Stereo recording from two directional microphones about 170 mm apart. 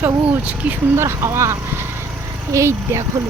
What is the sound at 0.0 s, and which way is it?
Speech, 10° right (ahead or behind).